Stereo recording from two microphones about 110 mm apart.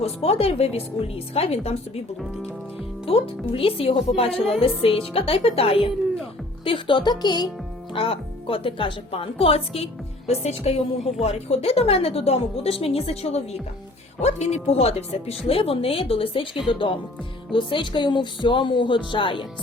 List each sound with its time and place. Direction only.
0.0 s speech: 65° left (ahead or behind)
3.5 s speech: 55° left (ahead or behind)
6.7 s speech: 50° left (ahead or behind)
7.9 s speech: 55° left (ahead or behind)
14.2 s speech: 85° left; by 19.5 s 50° left (ahead or behind)